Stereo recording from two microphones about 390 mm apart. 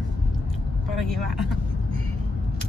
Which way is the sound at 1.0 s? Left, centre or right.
Centre.